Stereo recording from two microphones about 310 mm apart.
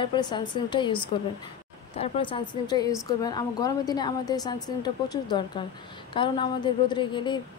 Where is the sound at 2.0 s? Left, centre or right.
Centre.